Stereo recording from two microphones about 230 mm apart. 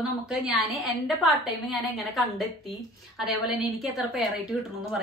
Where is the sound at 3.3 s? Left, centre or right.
Centre.